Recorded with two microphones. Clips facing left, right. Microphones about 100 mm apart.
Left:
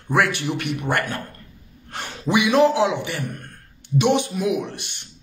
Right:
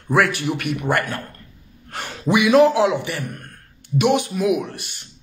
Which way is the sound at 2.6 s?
25° left (ahead or behind).